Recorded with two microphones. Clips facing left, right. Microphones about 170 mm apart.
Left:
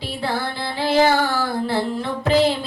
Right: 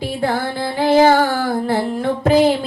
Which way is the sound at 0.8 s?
45° right (ahead or behind).